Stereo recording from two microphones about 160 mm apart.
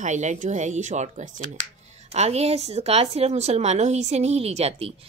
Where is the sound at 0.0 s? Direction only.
45° right (ahead or behind).